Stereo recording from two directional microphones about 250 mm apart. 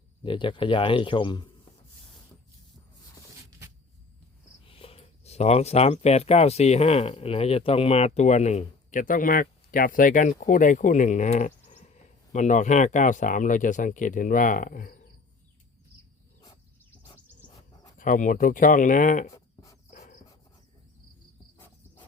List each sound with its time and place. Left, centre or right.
0.2 s speech: centre
4.6 s speech: left
17.9 s speech: left
19.3 s a sound: centre